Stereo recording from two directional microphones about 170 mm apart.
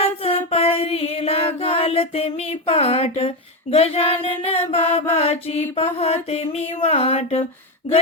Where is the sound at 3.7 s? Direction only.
35° left (ahead or behind).